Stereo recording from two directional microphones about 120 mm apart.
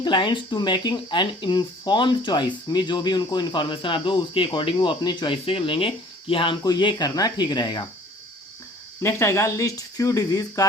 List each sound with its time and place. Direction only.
0.0 s speech: 40° left (ahead or behind)
9.0 s speech: 20° left (ahead or behind)